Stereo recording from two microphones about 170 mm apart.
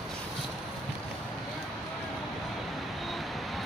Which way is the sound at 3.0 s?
Centre (ahead or behind).